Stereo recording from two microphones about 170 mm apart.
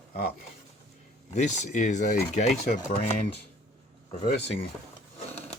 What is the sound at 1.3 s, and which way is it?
Speech, 45° left (ahead or behind).